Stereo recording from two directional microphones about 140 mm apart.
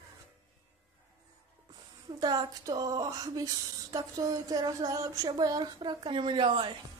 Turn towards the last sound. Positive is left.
turn(degrees=-35)  # may be behind; listen again after turning